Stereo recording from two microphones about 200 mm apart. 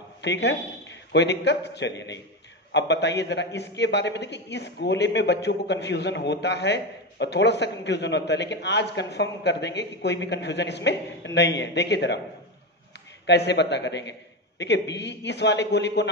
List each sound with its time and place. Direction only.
0.2 s a man's voice: 60° left (ahead or behind)
13.3 s a man's voice: 60° left (ahead or behind)